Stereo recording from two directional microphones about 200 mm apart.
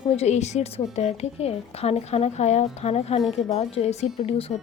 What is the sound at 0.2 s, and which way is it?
A woman's voice, 35° left (ahead or behind).